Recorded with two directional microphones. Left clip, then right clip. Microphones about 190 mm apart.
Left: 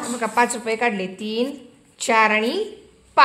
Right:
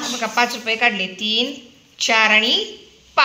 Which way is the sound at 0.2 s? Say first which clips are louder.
Even; 55° left (ahead or behind).